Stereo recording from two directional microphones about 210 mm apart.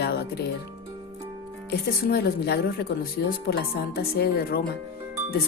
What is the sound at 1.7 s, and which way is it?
Speech, 50° left (ahead or behind).